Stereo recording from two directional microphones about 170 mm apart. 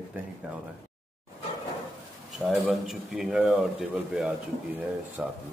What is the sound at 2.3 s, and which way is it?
Speech, centre (ahead or behind).